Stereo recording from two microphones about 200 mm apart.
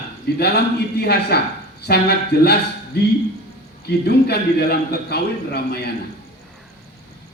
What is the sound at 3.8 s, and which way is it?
A man's voice, 55° left (ahead or behind).